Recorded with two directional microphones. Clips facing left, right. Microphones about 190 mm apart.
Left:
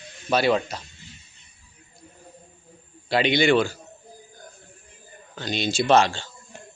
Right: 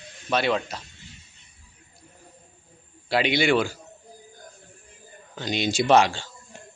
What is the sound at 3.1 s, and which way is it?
Speech, 5° right (ahead or behind).